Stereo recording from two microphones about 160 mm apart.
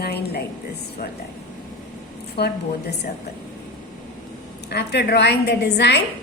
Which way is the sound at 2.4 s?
90° left.